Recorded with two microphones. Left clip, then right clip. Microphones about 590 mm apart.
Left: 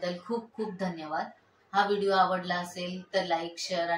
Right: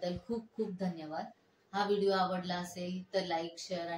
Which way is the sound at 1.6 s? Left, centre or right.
Right.